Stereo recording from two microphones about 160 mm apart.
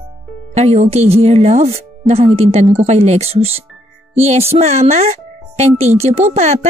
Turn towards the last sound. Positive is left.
turn(degrees=-45)  # may be behind; listen again after turning